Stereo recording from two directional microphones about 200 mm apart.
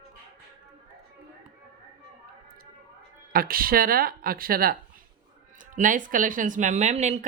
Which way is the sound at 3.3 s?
45° right (ahead or behind).